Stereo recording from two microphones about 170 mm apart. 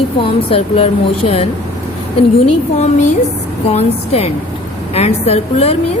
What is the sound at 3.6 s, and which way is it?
A woman's voice, 35° left (ahead or behind).